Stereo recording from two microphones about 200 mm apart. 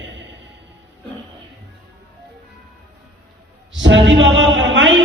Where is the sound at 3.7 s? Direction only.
70° right (ahead or behind).